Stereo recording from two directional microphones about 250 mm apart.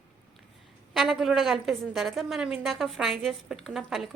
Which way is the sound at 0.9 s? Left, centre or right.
Centre.